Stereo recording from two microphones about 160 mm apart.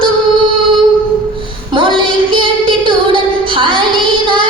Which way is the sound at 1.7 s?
30° right (ahead or behind).